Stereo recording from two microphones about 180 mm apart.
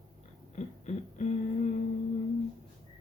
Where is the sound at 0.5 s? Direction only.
40° left (ahead or behind).